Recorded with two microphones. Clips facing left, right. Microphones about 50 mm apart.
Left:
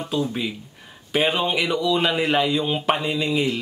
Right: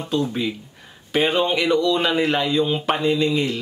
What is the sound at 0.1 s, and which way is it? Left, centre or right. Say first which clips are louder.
Speech: right 3 dB; centre.